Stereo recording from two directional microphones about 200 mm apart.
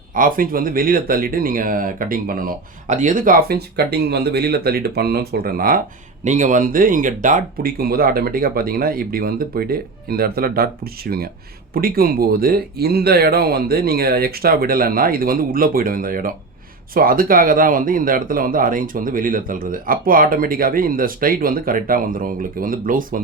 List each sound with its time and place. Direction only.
0.1 s speech: 45° right (ahead or behind)